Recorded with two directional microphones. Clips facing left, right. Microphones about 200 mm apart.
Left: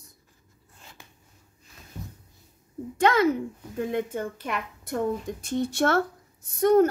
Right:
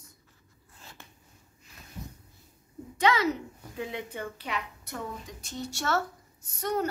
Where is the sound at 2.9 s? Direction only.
50° left (ahead or behind).